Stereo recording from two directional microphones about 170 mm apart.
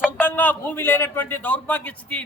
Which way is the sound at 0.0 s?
10° left (ahead or behind).